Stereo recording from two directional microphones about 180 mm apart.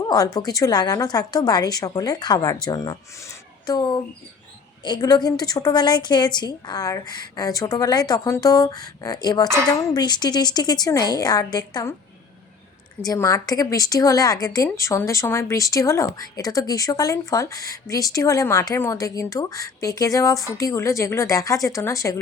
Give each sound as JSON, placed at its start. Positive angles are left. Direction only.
{"t": 0.0, "sound": "a woman's voice", "side_deg": 20}
{"t": 13.1, "sound": "a woman's voice", "side_deg": 15}